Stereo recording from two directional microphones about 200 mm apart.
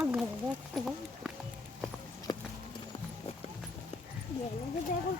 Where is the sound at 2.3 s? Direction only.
20° left (ahead or behind).